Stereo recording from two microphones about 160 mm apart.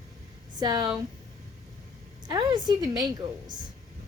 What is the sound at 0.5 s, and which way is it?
Speech, 25° right (ahead or behind).